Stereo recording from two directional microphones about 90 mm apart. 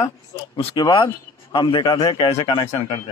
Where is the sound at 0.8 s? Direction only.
70° left (ahead or behind).